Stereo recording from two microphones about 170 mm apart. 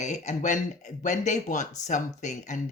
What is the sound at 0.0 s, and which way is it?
Speech, 45° left (ahead or behind).